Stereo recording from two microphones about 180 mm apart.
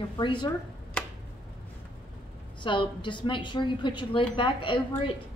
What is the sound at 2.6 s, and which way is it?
A woman's voice, 25° left (ahead or behind).